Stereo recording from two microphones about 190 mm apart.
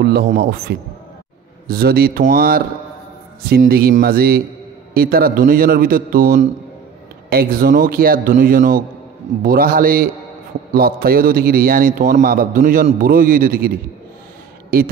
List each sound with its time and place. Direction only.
0.0 s a man's voice: 55° right (ahead or behind)